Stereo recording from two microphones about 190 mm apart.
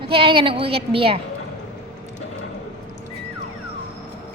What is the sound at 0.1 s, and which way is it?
A woman's voice, 30° right (ahead or behind).